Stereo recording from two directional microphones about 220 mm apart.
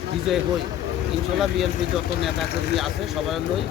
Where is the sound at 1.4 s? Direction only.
Centre (ahead or behind).